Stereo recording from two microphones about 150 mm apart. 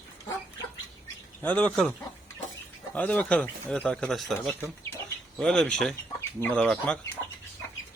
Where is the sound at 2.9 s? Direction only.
10° left (ahead or behind).